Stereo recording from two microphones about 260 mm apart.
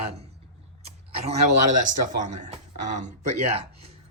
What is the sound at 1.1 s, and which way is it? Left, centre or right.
Speech, right.